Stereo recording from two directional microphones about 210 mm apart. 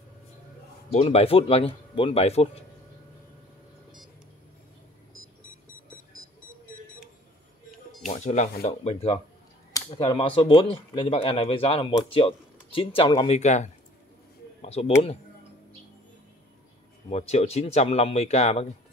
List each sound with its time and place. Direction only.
0.9 s speech: 30° left (ahead or behind)
8.0 s speech: 35° left (ahead or behind)
9.7 s speech: 20° left (ahead or behind)
17.1 s speech: 30° left (ahead or behind)